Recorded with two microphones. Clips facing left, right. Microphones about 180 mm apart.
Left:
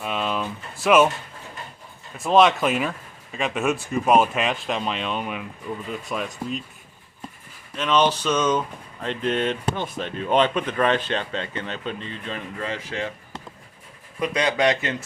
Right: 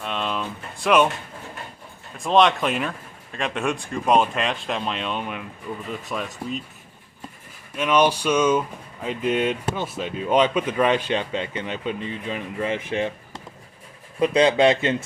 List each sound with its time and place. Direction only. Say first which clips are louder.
0.0 s a sound: left 1 dB; 5° left (ahead or behind)
2.1 s speech: left 1 dB; 5° left (ahead or behind)
7.8 s speech: right 1 dB; 10° right (ahead or behind)
14.2 s speech: right 5 dB; 25° right (ahead or behind)